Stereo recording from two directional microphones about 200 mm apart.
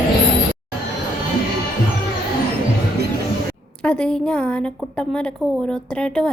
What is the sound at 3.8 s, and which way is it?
A woman's voice, 5° left (ahead or behind).